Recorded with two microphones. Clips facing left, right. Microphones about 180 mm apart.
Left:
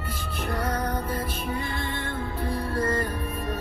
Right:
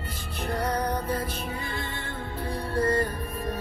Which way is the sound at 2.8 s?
30° right (ahead or behind).